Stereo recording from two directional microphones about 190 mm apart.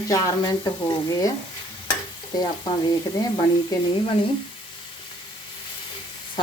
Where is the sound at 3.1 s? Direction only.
20° left (ahead or behind).